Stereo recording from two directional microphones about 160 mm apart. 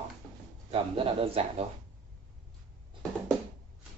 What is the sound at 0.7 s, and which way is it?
Speech, 35° right (ahead or behind).